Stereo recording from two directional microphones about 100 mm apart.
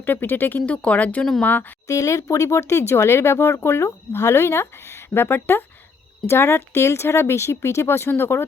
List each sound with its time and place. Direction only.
0.0 s speech: 20° left (ahead or behind)
1.9 s speech: 35° left (ahead or behind)